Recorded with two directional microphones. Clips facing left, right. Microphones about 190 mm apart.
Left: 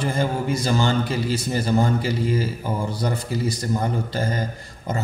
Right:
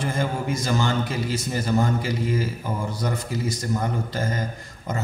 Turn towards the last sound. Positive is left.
turn(degrees=35)  # may be behind; listen again after turning